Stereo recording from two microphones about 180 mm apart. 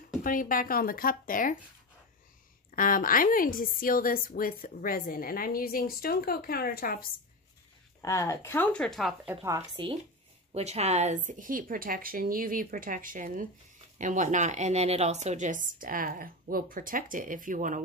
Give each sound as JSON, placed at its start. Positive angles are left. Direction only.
{"t": 0.2, "sound": "a woman's voice", "side_deg": 50}
{"t": 2.7, "sound": "a woman's voice", "side_deg": 50}
{"t": 8.0, "sound": "speech", "side_deg": 20}
{"t": 9.3, "sound": "speech", "side_deg": -15}
{"t": 10.5, "sound": "speech", "side_deg": -35}